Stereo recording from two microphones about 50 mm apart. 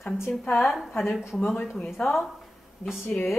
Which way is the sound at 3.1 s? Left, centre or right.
Centre.